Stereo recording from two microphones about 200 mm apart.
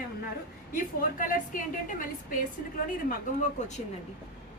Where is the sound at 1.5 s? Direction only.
45° left (ahead or behind).